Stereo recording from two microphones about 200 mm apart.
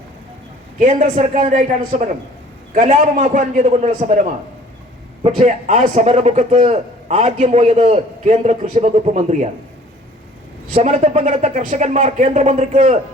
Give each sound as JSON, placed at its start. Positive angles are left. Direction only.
{"t": 0.9, "sound": "a man's voice", "side_deg": -40}
{"t": 10.8, "sound": "a man's voice", "side_deg": -35}